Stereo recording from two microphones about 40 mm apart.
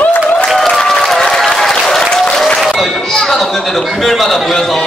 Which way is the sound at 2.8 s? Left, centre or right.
Centre.